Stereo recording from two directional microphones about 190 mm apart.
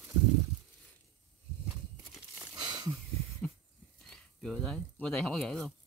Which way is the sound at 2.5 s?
20° right (ahead or behind).